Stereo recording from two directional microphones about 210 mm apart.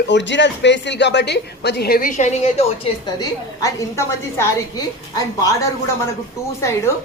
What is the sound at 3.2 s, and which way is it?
A woman's voice, 15° left (ahead or behind).